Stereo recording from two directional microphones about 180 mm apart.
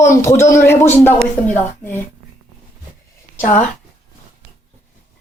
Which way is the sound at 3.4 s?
40° left (ahead or behind).